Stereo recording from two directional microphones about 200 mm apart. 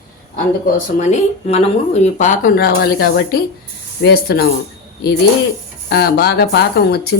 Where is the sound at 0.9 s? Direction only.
35° left (ahead or behind); by 4.4 s 50° left (ahead or behind).